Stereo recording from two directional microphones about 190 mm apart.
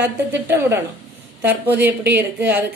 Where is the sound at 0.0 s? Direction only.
10° right (ahead or behind).